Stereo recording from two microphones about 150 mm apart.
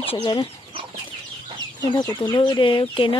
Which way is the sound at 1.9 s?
30° left (ahead or behind).